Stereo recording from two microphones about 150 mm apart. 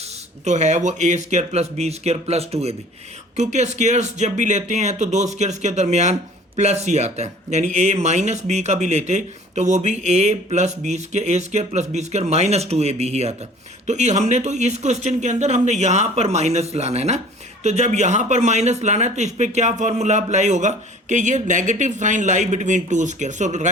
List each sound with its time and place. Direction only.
0.0 s speech: 50° right (ahead or behind)